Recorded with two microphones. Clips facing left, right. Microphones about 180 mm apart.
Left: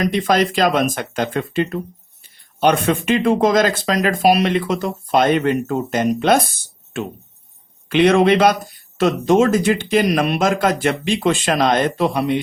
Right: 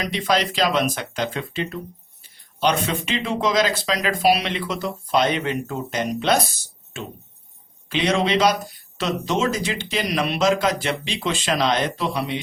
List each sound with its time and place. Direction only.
0.0 s a man's voice: 50° left (ahead or behind)